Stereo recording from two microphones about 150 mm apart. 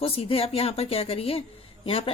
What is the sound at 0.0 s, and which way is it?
A woman's voice, 40° left (ahead or behind).